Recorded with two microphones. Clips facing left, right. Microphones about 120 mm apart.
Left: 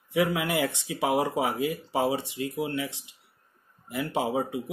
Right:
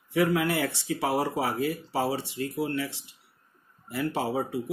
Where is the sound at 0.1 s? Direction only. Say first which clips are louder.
Right 1 dB; 15° left (ahead or behind).